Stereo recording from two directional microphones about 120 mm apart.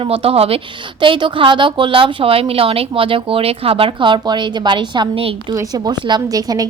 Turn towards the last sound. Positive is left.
turn(degrees=-30)  # may be behind; listen again after turning